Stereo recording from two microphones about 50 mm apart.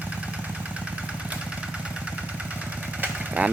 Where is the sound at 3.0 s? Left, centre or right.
Right.